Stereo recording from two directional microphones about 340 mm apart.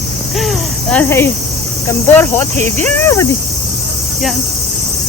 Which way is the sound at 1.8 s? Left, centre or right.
Centre.